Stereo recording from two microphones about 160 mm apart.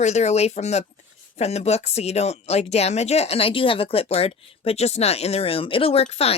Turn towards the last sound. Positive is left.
turn(degrees=40)  # may be behind; listen again after turning